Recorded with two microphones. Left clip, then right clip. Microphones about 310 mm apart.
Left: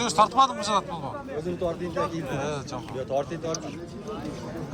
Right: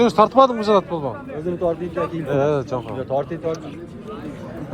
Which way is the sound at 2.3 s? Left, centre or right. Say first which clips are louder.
Right 11 dB; centre.